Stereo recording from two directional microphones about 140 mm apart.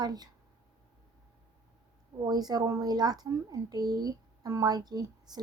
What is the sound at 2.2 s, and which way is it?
A child's voice, 30° right (ahead or behind).